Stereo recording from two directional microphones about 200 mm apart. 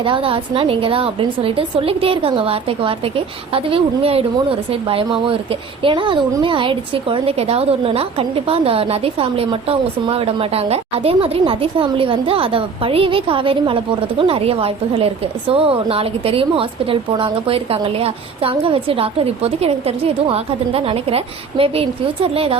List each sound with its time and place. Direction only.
0.0 s a woman's voice: 25° right (ahead or behind)